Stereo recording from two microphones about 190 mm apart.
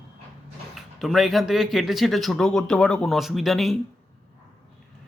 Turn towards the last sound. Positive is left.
turn(degrees=0)  # may be behind; listen again after turning